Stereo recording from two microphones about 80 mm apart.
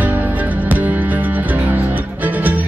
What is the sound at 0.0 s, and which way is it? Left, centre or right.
Music, right.